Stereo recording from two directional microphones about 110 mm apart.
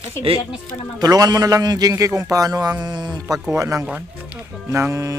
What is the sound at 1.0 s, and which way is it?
A man's voice, 35° right (ahead or behind).